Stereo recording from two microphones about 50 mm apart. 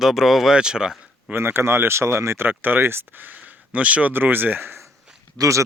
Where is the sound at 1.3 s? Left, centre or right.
Right.